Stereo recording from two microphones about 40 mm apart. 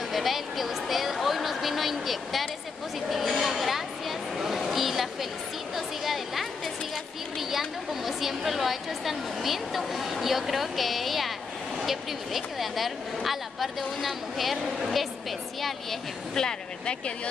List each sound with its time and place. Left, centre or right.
0.1 s a sound: centre
7.3 s a woman's voice: centre
16.3 s speech: left